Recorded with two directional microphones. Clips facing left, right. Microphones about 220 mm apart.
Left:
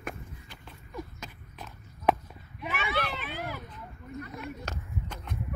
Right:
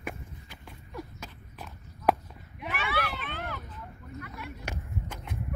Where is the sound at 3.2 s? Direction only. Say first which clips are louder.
Left 1 dB; 5° left (ahead or behind).